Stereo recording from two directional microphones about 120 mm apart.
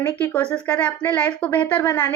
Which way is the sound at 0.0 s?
15° left (ahead or behind).